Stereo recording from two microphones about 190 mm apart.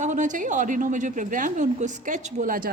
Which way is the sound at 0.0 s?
40° right (ahead or behind).